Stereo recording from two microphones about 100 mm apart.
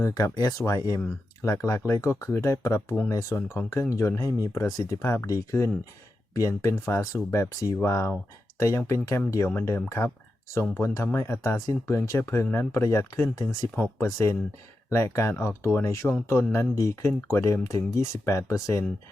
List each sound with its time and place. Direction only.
0.0 s speech: 35° left (ahead or behind)